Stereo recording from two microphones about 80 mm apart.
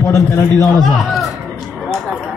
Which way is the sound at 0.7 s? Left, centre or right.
Centre.